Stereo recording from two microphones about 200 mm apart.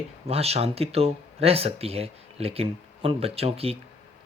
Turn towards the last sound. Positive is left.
turn(degrees=-30)  # may be behind; listen again after turning